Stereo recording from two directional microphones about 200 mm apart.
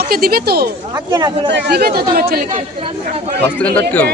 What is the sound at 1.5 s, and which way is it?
Speech, 50° right (ahead or behind).